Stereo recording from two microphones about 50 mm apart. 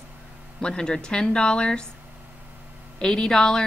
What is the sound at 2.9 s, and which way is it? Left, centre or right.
Speech, centre.